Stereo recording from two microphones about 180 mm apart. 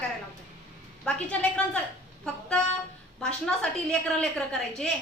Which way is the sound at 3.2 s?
5° left (ahead or behind).